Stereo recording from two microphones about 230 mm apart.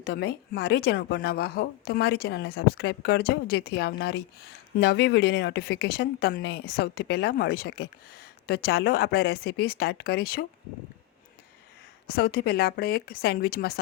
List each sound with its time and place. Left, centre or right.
0.0 s a woman's voice: left
12.0 s speech: left